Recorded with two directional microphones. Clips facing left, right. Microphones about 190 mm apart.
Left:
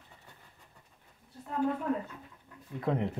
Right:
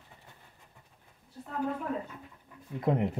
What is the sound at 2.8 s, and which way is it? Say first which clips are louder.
Speech: right 3 dB; 15° right (ahead or behind).